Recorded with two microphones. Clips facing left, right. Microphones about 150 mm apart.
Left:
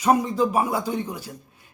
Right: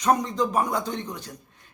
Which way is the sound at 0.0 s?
10° left (ahead or behind).